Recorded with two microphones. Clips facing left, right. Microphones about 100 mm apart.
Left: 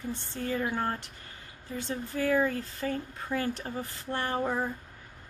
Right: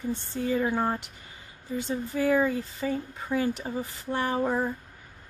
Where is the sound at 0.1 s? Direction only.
15° right (ahead or behind).